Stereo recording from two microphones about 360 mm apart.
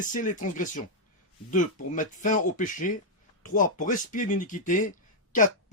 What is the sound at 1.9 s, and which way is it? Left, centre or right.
Speech, left.